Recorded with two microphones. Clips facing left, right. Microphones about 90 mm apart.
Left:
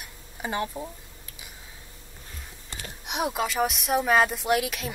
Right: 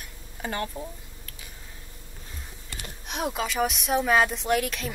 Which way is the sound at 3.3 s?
5° left (ahead or behind).